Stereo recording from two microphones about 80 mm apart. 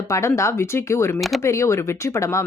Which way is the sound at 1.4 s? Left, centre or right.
Left.